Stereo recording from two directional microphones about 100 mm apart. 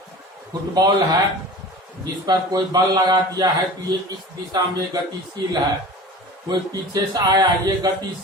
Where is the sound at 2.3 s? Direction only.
40° right (ahead or behind).